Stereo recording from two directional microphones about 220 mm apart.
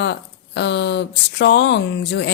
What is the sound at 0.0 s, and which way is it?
Speech, 50° left (ahead or behind).